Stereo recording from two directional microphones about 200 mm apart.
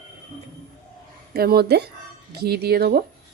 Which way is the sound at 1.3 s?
50° right (ahead or behind).